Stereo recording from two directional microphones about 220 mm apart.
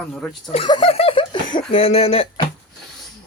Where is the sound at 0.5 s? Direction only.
25° left (ahead or behind).